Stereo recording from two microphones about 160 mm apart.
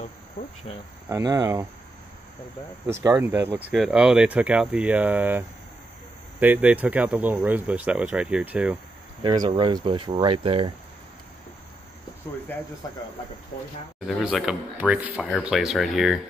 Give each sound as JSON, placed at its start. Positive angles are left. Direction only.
{"t": 0.4, "sound": "cricket", "side_deg": 55}
{"t": 1.0, "sound": "speech", "side_deg": -20}
{"t": 2.9, "sound": "speech", "side_deg": -20}
{"t": 6.4, "sound": "speech", "side_deg": -10}
{"t": 9.2, "sound": "speech", "side_deg": -25}
{"t": 14.0, "sound": "speech", "side_deg": -5}